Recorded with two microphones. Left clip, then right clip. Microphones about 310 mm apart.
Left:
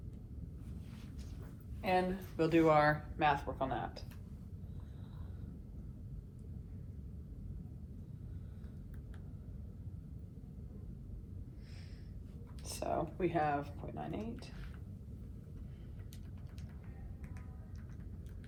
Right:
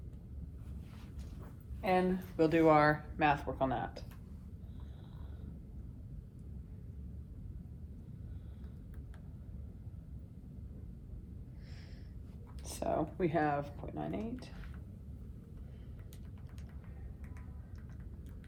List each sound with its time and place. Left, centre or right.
1.8 s speech: right
12.6 s speech: right